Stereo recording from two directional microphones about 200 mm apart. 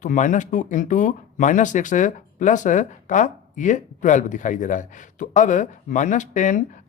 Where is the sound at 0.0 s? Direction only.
40° left (ahead or behind).